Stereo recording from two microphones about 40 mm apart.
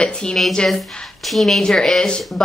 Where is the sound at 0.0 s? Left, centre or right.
Left.